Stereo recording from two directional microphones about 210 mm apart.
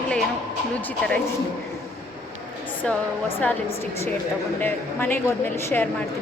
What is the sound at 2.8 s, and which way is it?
Speech, 5° left (ahead or behind).